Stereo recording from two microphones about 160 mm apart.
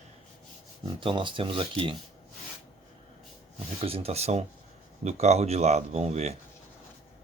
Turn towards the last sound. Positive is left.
turn(degrees=-40)  # may be behind; listen again after turning